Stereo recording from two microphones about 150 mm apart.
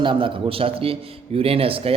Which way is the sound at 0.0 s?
35° right (ahead or behind).